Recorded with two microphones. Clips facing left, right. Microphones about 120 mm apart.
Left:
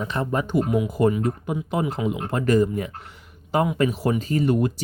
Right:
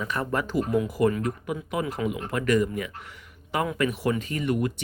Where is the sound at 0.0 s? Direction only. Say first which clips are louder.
Left 3 dB; 25° left (ahead or behind).